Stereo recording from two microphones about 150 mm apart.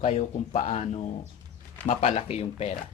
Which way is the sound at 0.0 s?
45° left (ahead or behind).